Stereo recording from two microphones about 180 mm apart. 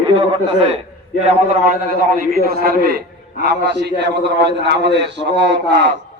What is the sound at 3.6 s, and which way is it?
A man's voice, 70° right (ahead or behind).